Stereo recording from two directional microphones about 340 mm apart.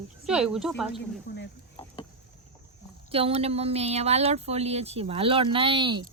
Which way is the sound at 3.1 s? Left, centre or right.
Centre.